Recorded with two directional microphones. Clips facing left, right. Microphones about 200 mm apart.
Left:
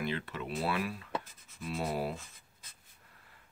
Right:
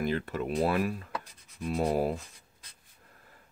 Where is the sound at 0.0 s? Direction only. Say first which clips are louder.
Right 6 dB; 45° right (ahead or behind).